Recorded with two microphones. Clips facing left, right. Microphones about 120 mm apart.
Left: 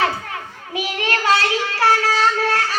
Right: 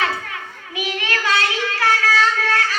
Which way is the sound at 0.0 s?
35° left (ahead or behind).